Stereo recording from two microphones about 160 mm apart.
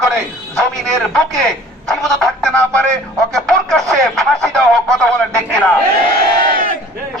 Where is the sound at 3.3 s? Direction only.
Centre (ahead or behind).